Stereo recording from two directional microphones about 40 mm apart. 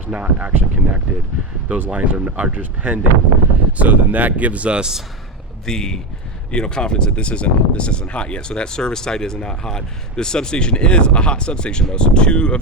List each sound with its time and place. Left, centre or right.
0.1 s speech: right
4.8 s a man's voice: centre
5.6 s speech: centre